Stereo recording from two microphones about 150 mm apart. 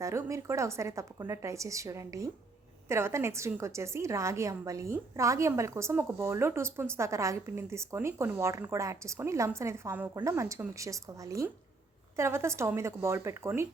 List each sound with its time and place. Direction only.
0.0 s a woman's voice: 20° right (ahead or behind)